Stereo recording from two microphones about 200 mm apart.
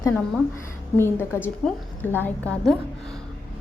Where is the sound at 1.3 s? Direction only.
5° right (ahead or behind).